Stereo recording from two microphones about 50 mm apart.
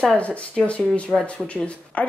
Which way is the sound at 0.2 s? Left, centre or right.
Left.